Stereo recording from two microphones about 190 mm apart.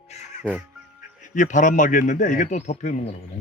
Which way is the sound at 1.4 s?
40° left (ahead or behind).